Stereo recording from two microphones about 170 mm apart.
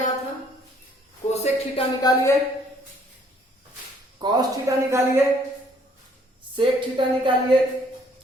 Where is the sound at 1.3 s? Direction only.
40° left (ahead or behind).